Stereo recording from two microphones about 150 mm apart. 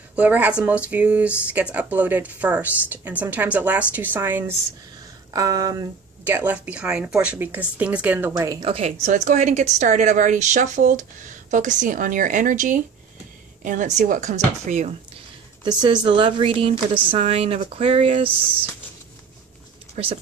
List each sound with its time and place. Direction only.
0.1 s speech: 10° right (ahead or behind)
6.2 s speech: 10° right (ahead or behind)
8.3 s speech: 20° right (ahead or behind)
8.6 s a woman's voice: 40° right (ahead or behind)
9.0 s a woman's voice: 55° right (ahead or behind)
15.6 s a woman's voice: 30° right (ahead or behind)